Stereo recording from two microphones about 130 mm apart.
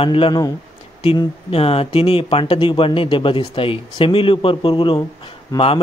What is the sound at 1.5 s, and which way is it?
Speech, 50° left (ahead or behind).